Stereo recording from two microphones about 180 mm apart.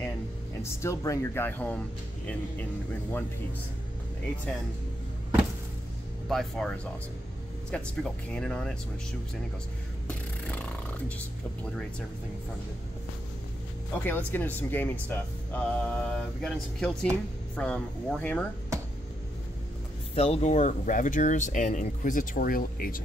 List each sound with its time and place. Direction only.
0.6 s speech: 15° left (ahead or behind)
2.9 s speech: 10° left (ahead or behind)
4.5 s speech: 5° left (ahead or behind)
6.2 s speech: centre (ahead or behind)
10.0 s music: 10° left (ahead or behind)
14.0 s speech: 10° left (ahead or behind)
20.2 s speech: 40° left (ahead or behind)